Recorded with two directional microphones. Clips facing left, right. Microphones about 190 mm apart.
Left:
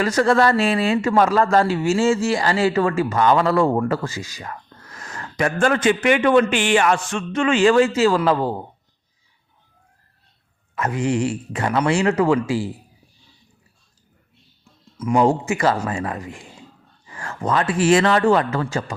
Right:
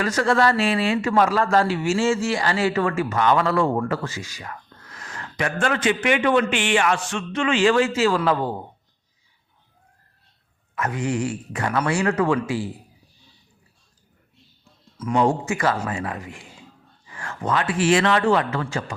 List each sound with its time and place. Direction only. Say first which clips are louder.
0.0 s a man's voice: left 3 dB; 35° left (ahead or behind)
10.8 s speech: left 3 dB; 30° left (ahead or behind)
14.9 s a man's voice: left 4 dB; 10° left (ahead or behind)
15.2 s speech: left 2 dB; 25° left (ahead or behind)